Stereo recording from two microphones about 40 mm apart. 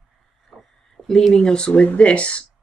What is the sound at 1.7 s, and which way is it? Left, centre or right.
Speech, left.